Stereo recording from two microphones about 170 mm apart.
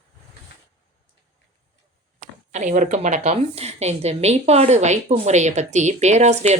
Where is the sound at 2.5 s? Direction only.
45° right (ahead or behind).